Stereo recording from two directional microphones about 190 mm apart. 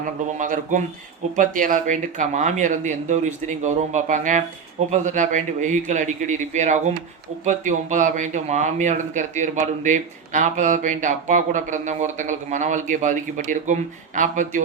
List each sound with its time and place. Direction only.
0.0 s a man's voice: 45° right (ahead or behind)